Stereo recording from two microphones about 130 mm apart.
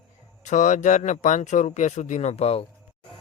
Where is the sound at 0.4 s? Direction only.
75° left (ahead or behind); by 2.6 s 50° left (ahead or behind).